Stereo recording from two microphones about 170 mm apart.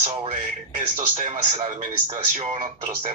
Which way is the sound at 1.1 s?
45° right (ahead or behind).